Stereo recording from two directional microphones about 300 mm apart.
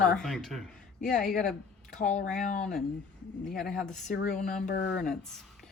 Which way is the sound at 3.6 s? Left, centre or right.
Centre.